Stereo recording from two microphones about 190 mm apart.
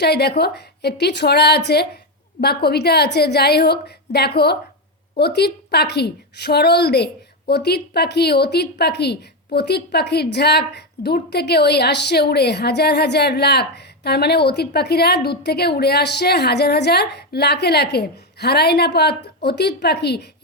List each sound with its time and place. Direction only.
0.0 s a woman's voice: 60° left (ahead or behind)